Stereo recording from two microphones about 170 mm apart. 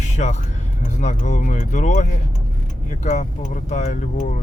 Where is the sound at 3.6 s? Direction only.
45° left (ahead or behind).